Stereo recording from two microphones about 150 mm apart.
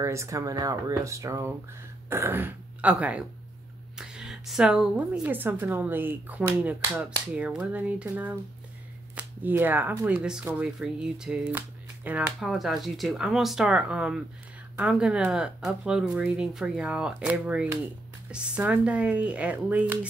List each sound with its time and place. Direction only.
0.0 s a woman's voice: 20° right (ahead or behind)